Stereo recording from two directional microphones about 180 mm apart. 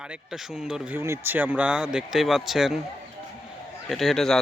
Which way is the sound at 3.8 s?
Centre (ahead or behind).